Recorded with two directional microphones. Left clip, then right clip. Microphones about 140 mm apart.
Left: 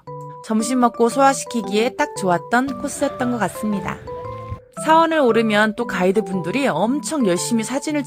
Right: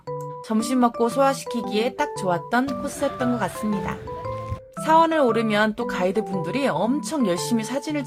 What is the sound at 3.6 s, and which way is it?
Speech, centre (ahead or behind).